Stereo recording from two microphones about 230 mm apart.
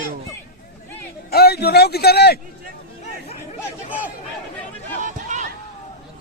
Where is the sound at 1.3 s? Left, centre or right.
Left.